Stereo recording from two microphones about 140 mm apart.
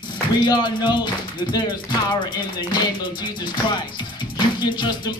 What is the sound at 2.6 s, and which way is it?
Music, 30° left (ahead or behind).